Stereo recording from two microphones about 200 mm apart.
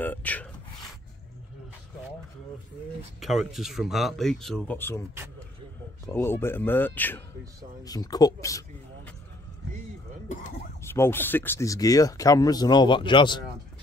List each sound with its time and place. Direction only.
0.0 s rub: 10° left (ahead or behind)
3.2 s speech: centre (ahead or behind)
6.1 s speech: 10° left (ahead or behind)
10.8 s speech: 10° left (ahead or behind)